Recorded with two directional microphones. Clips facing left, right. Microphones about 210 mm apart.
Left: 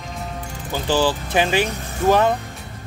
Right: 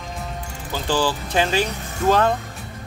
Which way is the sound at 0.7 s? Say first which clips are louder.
Left 2 dB; 20° left (ahead or behind).